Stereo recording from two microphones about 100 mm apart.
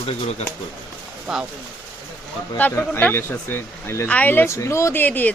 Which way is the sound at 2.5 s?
20° left (ahead or behind).